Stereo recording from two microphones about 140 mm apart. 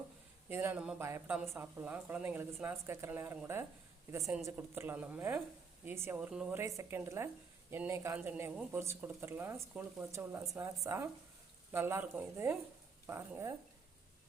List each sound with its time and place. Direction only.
0.4 s a man's voice: 15° right (ahead or behind)
6.6 s a woman's voice: 20° right (ahead or behind)